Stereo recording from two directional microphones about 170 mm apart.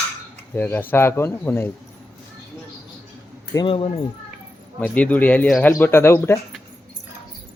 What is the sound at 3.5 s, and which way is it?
Speech, 30° left (ahead or behind).